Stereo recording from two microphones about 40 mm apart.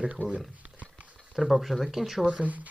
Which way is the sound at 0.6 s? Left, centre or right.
Right.